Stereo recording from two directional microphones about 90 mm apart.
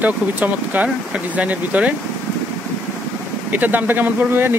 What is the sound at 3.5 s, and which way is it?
Speech, 20° right (ahead or behind).